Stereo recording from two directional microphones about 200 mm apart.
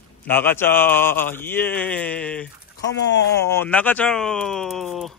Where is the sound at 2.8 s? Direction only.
60° left (ahead or behind).